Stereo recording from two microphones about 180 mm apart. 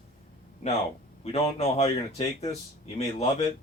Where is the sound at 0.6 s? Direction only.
40° left (ahead or behind).